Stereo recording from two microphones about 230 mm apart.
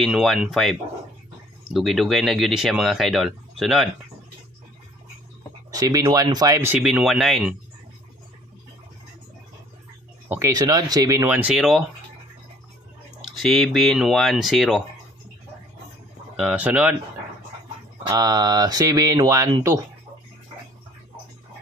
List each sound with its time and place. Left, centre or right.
0.0 s speech: centre
5.7 s speech: centre
10.2 s speech: centre
13.4 s speech: centre
16.3 s speech: centre
18.0 s speech: centre